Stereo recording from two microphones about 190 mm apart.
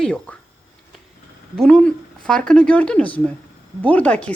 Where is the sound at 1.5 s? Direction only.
5° left (ahead or behind).